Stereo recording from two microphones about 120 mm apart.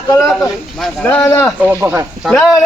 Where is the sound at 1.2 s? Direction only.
20° left (ahead or behind).